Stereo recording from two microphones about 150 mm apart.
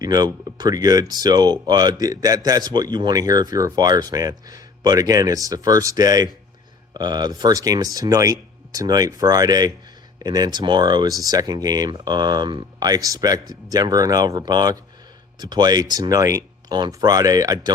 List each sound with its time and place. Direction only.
0.0 s speech: 25° right (ahead or behind)